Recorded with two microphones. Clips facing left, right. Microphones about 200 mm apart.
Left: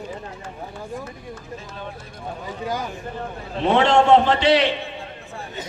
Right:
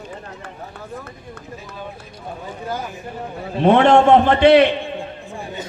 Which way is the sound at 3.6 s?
55° right (ahead or behind).